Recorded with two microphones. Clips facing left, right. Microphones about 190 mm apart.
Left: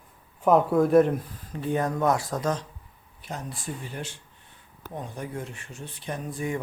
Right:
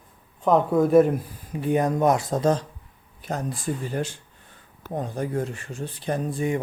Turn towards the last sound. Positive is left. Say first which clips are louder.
# right 6 dB
turn(degrees=-25)  # may be behind; listen again after turning